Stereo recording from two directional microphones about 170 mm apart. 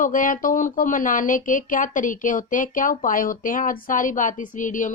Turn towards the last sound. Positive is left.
turn(degrees=50)  # may be behind; listen again after turning